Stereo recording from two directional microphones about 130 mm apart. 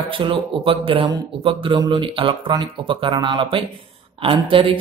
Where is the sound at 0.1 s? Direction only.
40° right (ahead or behind).